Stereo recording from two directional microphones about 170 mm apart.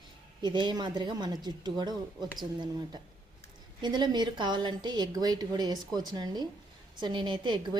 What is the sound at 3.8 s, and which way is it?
A woman's voice, 25° right (ahead or behind).